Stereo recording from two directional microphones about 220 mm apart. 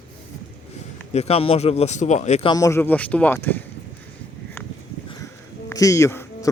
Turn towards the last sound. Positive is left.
turn(degrees=10)  # may be behind; listen again after turning